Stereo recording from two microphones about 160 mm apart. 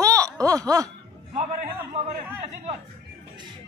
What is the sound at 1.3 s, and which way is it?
Speech, 45° right (ahead or behind).